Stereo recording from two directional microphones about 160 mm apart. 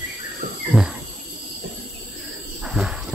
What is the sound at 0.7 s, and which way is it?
Wild animals, 15° right (ahead or behind).